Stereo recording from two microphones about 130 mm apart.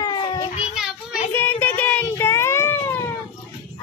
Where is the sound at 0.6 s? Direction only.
5° right (ahead or behind).